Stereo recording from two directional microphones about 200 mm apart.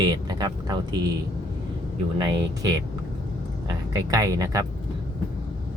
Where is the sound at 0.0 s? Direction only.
20° right (ahead or behind).